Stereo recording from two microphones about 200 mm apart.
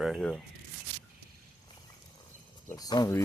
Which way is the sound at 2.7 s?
20° left (ahead or behind).